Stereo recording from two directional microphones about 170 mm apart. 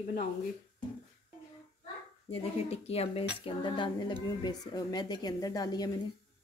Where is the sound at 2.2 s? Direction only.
35° left (ahead or behind).